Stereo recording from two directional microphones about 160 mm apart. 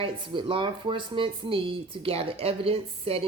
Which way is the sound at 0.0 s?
35° right (ahead or behind).